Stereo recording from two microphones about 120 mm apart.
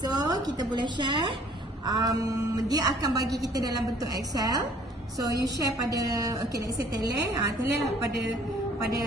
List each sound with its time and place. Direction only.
0.1 s a woman's voice: 35° right (ahead or behind)